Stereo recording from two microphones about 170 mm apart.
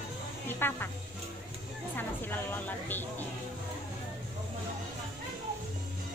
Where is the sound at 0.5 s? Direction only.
15° left (ahead or behind).